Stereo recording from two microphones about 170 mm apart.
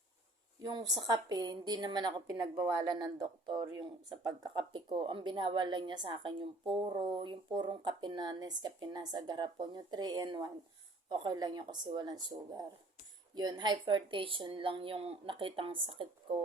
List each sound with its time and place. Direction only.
0.6 s speech: 25° right (ahead or behind)